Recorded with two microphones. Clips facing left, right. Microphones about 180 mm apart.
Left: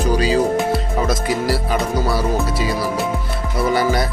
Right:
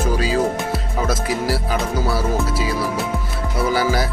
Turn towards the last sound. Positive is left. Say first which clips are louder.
# left 2 dB
turn(degrees=-5)  # may be behind; listen again after turning